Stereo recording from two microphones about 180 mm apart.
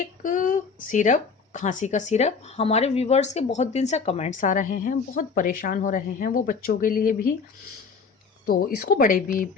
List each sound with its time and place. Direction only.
0.0 s a woman's voice: 45° left (ahead or behind)
8.4 s a woman's voice: 55° left (ahead or behind)